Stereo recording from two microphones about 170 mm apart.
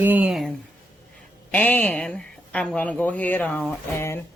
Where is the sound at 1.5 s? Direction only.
10° left (ahead or behind).